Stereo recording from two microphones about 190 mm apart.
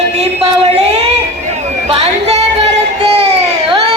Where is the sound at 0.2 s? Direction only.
35° right (ahead or behind).